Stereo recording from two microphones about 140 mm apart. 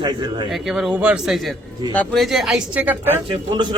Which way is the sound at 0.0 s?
35° right (ahead or behind).